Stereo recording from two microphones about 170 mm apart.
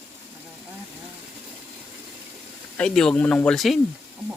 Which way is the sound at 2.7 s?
5° left (ahead or behind).